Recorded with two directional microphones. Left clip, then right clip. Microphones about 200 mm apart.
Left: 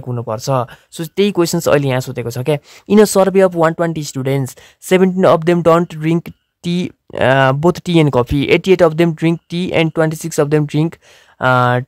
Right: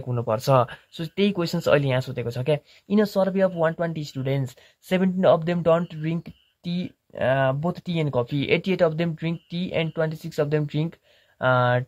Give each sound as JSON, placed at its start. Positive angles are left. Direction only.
{"t": 0.1, "sound": "speech", "side_deg": 20}
{"t": 0.9, "sound": "speech", "side_deg": 30}